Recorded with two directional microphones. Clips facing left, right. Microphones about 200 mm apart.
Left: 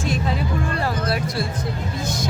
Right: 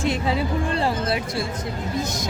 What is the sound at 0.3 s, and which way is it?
Music, 25° right (ahead or behind).